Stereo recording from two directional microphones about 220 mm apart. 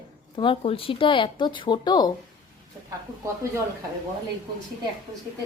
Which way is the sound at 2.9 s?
10° right (ahead or behind).